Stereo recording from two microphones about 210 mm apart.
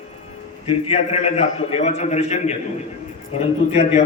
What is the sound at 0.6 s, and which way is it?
A man's voice, 30° left (ahead or behind).